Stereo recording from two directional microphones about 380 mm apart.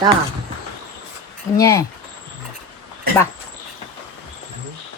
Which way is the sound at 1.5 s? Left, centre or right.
Centre.